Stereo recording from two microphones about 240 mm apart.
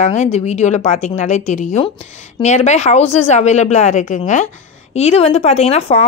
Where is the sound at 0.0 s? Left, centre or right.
Left.